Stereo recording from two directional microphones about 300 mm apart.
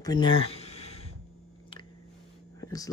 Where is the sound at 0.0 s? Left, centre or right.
Centre.